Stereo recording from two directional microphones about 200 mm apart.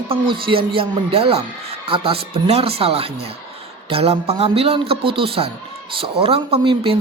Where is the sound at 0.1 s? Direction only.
25° right (ahead or behind).